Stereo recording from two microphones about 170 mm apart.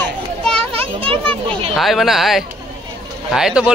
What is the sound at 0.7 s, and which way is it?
Speech, 35° right (ahead or behind).